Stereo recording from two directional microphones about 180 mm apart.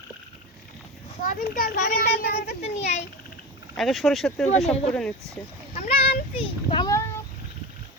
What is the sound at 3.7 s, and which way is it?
Speech, centre (ahead or behind).